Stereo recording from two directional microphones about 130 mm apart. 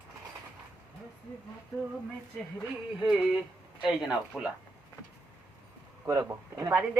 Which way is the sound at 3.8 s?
5° right (ahead or behind).